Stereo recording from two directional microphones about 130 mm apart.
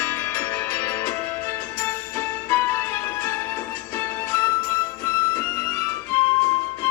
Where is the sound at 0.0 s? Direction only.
20° left (ahead or behind).